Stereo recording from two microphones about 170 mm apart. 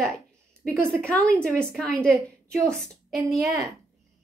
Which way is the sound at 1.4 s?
5° left (ahead or behind).